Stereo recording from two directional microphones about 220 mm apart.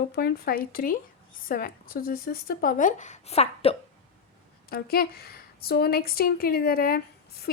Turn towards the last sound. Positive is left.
turn(degrees=40)  # may be behind; listen again after turning